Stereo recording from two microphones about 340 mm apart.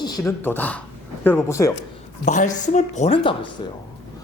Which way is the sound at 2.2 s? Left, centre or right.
Left.